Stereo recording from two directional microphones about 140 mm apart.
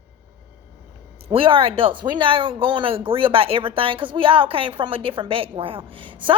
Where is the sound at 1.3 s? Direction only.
40° right (ahead or behind).